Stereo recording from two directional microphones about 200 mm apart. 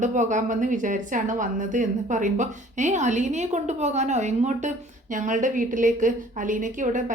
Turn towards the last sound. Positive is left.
turn(degrees=-40)  # may be behind; listen again after turning